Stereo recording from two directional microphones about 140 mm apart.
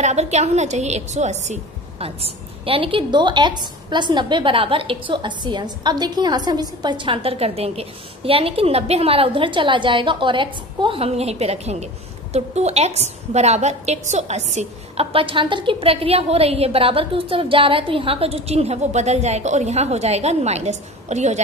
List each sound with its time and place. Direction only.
0.0 s a woman's voice: 55° right (ahead or behind)